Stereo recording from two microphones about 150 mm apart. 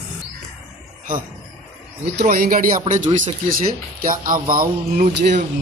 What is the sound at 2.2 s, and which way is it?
Speech, 70° right (ahead or behind).